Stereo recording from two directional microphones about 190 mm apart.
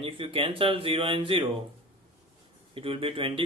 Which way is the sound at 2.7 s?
30° right (ahead or behind).